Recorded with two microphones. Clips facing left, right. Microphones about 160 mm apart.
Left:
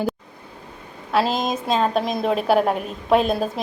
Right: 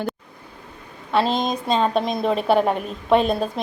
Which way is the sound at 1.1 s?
5° left (ahead or behind).